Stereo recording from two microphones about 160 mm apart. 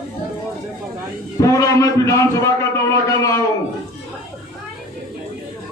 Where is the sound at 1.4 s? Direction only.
20° left (ahead or behind).